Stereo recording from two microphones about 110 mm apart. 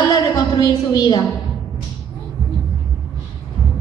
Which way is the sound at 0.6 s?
35° left (ahead or behind).